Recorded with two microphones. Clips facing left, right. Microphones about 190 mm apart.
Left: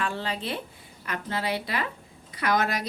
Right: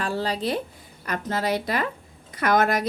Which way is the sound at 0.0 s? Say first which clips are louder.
Right 5 dB; 40° right (ahead or behind).